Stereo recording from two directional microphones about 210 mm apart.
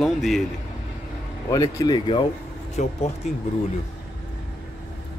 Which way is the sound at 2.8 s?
35° left (ahead or behind).